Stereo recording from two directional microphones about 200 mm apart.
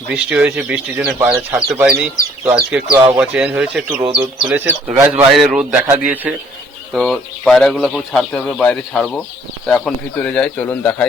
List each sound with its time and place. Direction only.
0.1 s speech: 5° right (ahead or behind)
2.9 s speech: 20° right (ahead or behind)
3.2 s speech: 5° right (ahead or behind)
6.9 s speech: 5° left (ahead or behind)